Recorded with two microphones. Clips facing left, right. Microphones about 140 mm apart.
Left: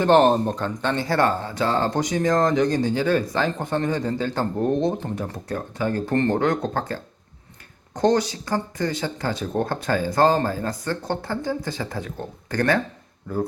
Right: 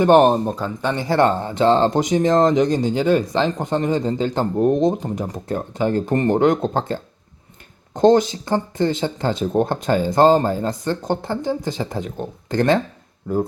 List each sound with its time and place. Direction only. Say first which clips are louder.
0.0 s speech: right 3 dB; 15° right (ahead or behind)